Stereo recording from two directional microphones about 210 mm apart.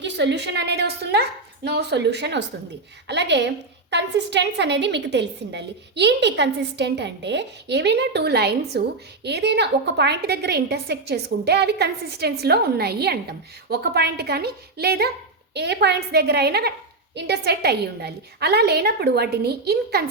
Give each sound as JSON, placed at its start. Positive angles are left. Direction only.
{"t": 0.0, "sound": "a woman's voice", "side_deg": -55}